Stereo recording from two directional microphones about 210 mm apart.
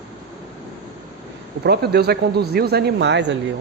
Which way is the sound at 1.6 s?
50° right (ahead or behind).